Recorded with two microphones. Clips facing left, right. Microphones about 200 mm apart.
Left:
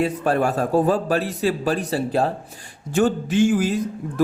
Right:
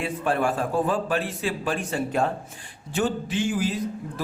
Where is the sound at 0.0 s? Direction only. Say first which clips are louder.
Left 5 dB; 40° left (ahead or behind).